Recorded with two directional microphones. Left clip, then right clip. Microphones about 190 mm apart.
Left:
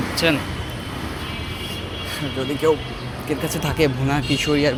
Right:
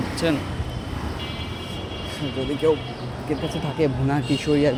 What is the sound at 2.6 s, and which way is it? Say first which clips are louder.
Speech: left 2 dB; 10° right (ahead or behind).